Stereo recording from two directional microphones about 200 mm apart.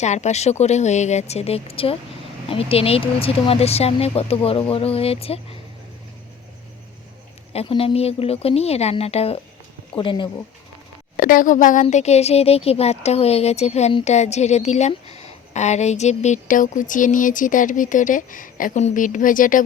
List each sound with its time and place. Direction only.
0.0 s speech: 35° left (ahead or behind)
7.5 s speech: 30° left (ahead or behind)
11.2 s speech: 45° left (ahead or behind)